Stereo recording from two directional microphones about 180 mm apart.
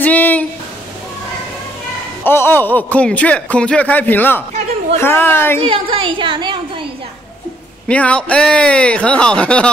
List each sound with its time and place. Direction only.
0.0 s a sound: 10° left (ahead or behind)
2.2 s speech: 10° left (ahead or behind)
5.6 s a woman's voice: 30° right (ahead or behind)
7.9 s speech: 5° left (ahead or behind)